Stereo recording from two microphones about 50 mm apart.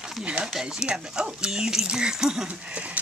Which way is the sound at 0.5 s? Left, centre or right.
Centre.